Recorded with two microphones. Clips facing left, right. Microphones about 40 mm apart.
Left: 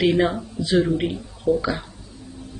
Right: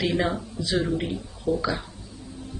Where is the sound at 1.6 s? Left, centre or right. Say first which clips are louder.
Left 2 dB; centre.